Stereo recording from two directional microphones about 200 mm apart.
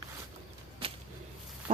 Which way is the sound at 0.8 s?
30° right (ahead or behind).